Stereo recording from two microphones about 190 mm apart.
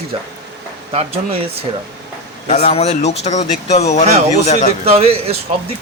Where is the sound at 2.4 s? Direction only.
35° left (ahead or behind).